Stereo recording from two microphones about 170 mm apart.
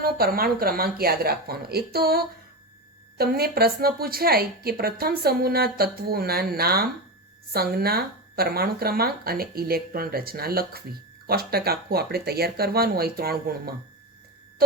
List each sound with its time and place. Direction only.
0.0 s a woman's voice: 60° right (ahead or behind)